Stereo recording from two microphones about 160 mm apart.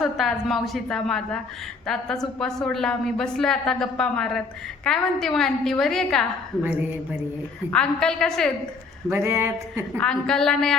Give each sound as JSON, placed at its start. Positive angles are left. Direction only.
{"t": 0.0, "sound": "a woman's voice", "side_deg": 0}
{"t": 7.7, "sound": "a woman's voice", "side_deg": 5}
{"t": 9.0, "sound": "speech", "side_deg": -15}
{"t": 10.0, "sound": "a woman's voice", "side_deg": 5}